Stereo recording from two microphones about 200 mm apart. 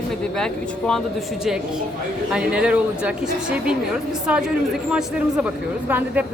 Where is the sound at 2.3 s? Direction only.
5° right (ahead or behind).